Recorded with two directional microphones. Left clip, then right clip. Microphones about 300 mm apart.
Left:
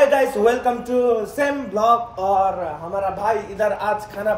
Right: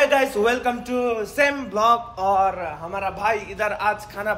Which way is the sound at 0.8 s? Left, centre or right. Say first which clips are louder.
Left 5 dB; centre.